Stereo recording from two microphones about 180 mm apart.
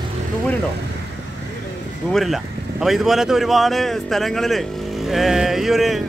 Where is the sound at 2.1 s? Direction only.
Centre (ahead or behind).